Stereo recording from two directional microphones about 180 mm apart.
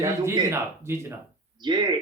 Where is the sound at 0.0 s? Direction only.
15° right (ahead or behind).